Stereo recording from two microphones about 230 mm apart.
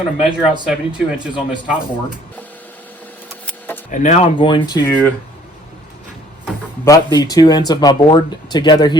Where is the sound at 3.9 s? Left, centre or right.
Left.